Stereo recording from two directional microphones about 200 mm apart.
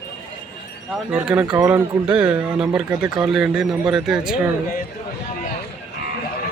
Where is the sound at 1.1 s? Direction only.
5° right (ahead or behind).